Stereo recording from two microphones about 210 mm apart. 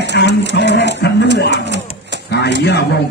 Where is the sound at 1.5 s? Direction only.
55° right (ahead or behind).